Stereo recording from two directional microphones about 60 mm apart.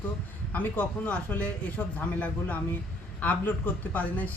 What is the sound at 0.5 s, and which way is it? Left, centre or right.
A man's voice, left.